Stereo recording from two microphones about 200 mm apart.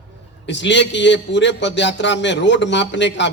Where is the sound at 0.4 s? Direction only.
65° left (ahead or behind).